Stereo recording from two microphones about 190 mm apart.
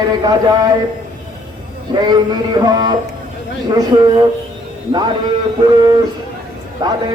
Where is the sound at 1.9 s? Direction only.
25° right (ahead or behind).